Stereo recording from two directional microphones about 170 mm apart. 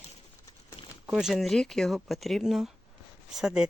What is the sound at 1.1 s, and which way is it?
Speech, 5° right (ahead or behind).